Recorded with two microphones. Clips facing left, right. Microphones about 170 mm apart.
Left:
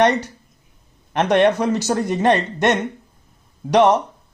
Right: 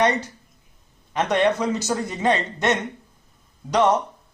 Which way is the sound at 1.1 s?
65° left (ahead or behind).